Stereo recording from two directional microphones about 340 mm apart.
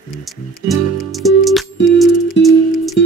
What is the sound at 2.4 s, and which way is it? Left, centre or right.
Music, left.